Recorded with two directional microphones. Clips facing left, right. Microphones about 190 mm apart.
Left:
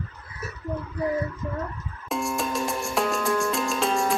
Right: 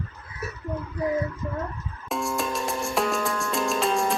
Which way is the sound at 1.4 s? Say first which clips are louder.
Even; 5° right (ahead or behind).